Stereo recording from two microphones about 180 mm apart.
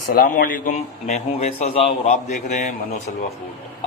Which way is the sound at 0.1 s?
50° left (ahead or behind).